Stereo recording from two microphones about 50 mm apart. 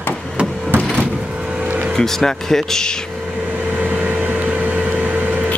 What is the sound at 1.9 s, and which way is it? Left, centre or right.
Speech, centre.